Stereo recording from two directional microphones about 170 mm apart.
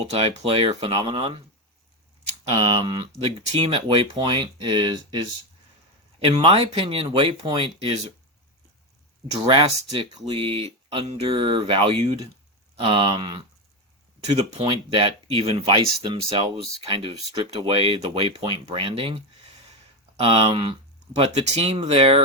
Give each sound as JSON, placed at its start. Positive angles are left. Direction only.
{"t": 0.0, "sound": "speech", "side_deg": -35}
{"t": 2.5, "sound": "speech", "side_deg": -30}
{"t": 9.3, "sound": "speech", "side_deg": -35}
{"t": 14.6, "sound": "speech", "side_deg": -30}